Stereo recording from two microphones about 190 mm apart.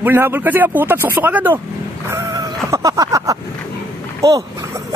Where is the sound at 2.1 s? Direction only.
20° right (ahead or behind).